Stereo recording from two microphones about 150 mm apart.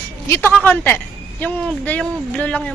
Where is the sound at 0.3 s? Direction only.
15° left (ahead or behind).